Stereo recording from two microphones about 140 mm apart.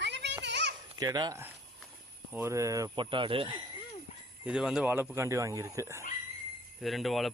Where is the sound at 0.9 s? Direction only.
30° right (ahead or behind).